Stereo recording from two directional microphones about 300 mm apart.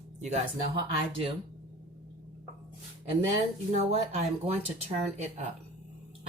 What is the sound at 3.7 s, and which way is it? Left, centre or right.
Speech, right.